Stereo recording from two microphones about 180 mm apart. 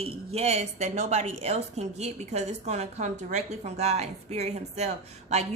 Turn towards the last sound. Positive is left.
turn(degrees=-40)  # may be behind; listen again after turning